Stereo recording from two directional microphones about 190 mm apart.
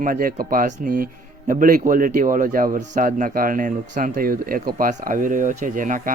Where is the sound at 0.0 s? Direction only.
45° right (ahead or behind).